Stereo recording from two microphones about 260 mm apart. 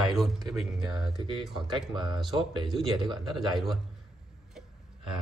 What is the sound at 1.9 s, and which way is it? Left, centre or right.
Speech, centre.